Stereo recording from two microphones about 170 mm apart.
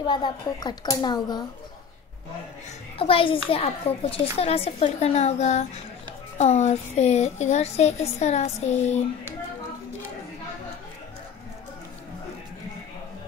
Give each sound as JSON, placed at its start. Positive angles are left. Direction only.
{"t": 0.1, "sound": "a child's voice", "side_deg": 25}
{"t": 3.0, "sound": "a woman's voice", "side_deg": 30}